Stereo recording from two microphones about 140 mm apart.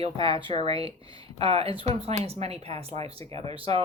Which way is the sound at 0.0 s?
40° right (ahead or behind).